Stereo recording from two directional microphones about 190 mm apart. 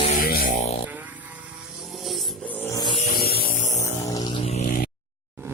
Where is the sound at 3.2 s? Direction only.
55° left (ahead or behind).